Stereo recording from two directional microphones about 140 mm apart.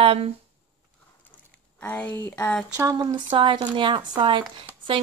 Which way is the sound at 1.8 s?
10° left (ahead or behind).